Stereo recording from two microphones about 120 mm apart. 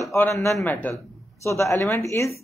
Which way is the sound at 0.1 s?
25° left (ahead or behind).